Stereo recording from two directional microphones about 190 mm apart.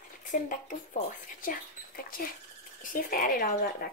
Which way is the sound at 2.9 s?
45° left (ahead or behind).